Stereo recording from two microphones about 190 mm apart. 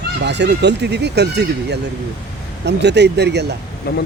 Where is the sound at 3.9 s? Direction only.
55° left (ahead or behind).